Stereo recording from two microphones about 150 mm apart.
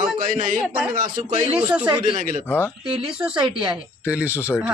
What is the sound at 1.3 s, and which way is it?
Speech, 35° right (ahead or behind).